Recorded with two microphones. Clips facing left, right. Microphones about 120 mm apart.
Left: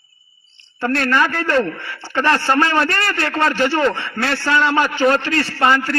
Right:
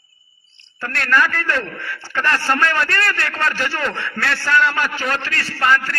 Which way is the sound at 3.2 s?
40° left (ahead or behind).